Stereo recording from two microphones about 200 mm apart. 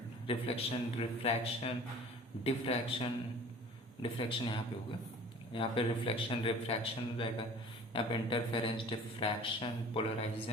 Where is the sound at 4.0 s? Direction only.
25° left (ahead or behind).